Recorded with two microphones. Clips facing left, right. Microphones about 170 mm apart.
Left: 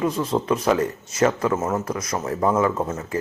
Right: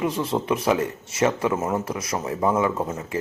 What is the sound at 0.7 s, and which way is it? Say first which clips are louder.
Speech: left 2 dB; 25° right (ahead or behind).